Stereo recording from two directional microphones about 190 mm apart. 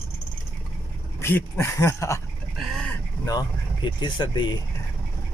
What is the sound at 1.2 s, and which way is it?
Speech, 10° left (ahead or behind).